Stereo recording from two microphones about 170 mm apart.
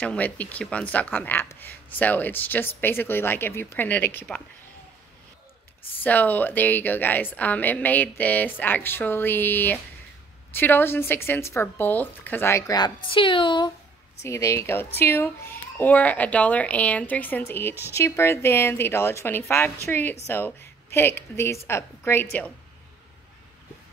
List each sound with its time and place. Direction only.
0.0 s a child's voice: 10° left (ahead or behind)
6.0 s a child's voice: 10° left (ahead or behind); by 13.7 s 30° left (ahead or behind)
14.2 s a child's voice: 15° left (ahead or behind)